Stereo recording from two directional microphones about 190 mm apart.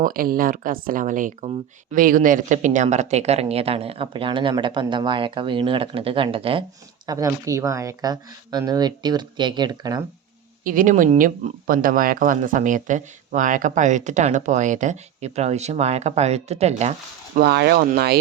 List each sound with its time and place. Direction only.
0.0 s speech: 50° right (ahead or behind); by 6.7 s 30° right (ahead or behind)
7.1 s speech: 20° right (ahead or behind)
10.6 s speech: 45° right (ahead or behind)
17.3 s speech: 55° right (ahead or behind)